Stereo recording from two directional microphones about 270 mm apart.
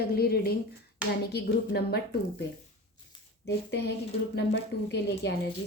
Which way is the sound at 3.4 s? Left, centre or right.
Left.